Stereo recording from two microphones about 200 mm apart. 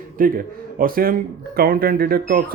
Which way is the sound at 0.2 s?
45° right (ahead or behind).